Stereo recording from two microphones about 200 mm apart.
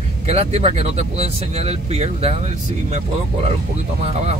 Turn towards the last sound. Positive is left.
turn(degrees=-30)  # may be behind; listen again after turning